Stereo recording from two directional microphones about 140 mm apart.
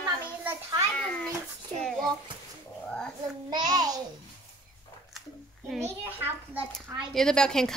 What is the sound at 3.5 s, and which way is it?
Speech, 30° right (ahead or behind).